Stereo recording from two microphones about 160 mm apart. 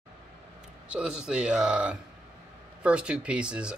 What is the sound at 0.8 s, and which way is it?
Speech, 5° right (ahead or behind).